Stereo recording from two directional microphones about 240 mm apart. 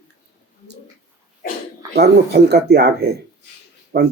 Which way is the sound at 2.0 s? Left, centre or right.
Right.